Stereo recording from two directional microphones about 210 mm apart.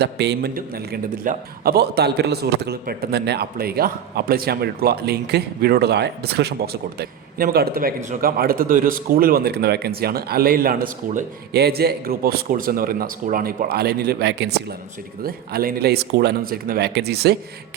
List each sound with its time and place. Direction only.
0.0 s a man's voice: 55° right (ahead or behind)